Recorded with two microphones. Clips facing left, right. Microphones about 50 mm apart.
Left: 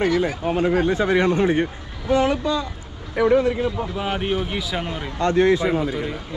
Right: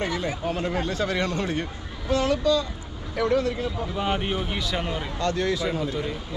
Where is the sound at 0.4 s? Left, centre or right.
Centre.